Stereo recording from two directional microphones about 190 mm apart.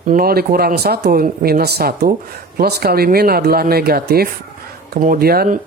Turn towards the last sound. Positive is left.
turn(degrees=-55)  # may be behind; listen again after turning